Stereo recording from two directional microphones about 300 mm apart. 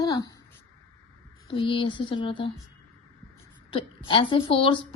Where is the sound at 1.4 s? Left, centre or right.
Centre.